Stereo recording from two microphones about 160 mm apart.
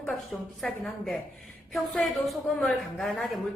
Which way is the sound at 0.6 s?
5° left (ahead or behind).